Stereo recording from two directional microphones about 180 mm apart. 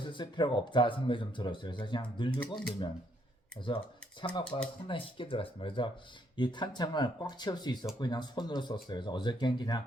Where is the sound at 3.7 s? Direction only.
25° left (ahead or behind).